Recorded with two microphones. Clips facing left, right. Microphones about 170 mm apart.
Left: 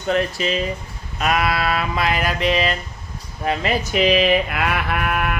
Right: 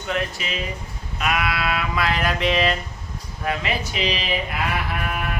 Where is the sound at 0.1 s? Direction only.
35° left (ahead or behind).